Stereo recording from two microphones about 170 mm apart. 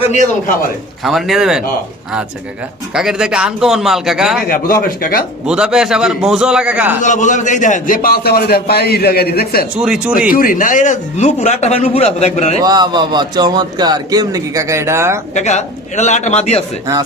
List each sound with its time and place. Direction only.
0.0 s a man's voice: 45° left (ahead or behind)
1.0 s a man's voice: centre (ahead or behind)
2.9 s a man's voice: 5° right (ahead or behind)
4.4 s a man's voice: 60° left (ahead or behind)
5.5 s a man's voice: 5° right (ahead or behind)
7.0 s a man's voice: 45° left (ahead or behind); by 9.6 s 65° left (ahead or behind)
9.7 s a man's voice: 5° right (ahead or behind)
10.3 s a man's voice: 55° left (ahead or behind)
12.6 s a man's voice: 25° right (ahead or behind)
15.4 s a man's voice: 45° left (ahead or behind)